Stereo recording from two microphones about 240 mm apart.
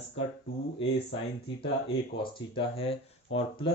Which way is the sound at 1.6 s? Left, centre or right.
Left.